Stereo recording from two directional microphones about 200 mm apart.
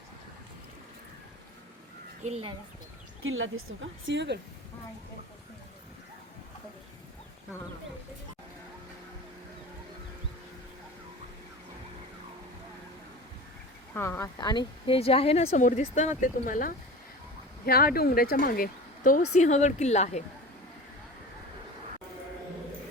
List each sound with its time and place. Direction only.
2.2 s speech: 30° right (ahead or behind)
3.2 s a woman's voice: 80° right; by 4.4 s 65° right (ahead or behind)
13.9 s speech: 10° left (ahead or behind); by 20.2 s 35° left (ahead or behind)